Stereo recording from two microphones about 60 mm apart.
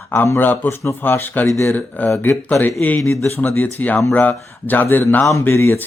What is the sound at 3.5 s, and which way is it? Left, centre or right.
Speech, left.